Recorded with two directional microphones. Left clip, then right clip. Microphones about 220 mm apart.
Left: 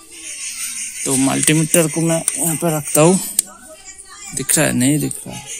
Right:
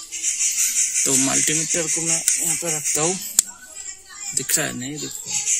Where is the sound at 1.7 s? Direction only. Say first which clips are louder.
Left 7 dB; 35° left (ahead or behind).